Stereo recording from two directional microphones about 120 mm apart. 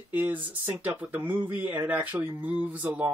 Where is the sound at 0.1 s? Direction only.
15° right (ahead or behind).